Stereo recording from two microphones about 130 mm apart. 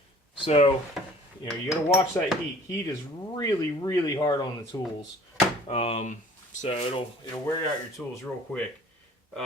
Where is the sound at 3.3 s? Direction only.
30° left (ahead or behind).